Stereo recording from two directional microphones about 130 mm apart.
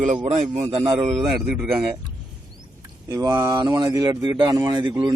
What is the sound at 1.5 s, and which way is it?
Speech, 10° right (ahead or behind).